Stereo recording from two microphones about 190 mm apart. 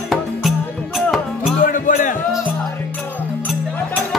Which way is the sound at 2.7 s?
10° left (ahead or behind).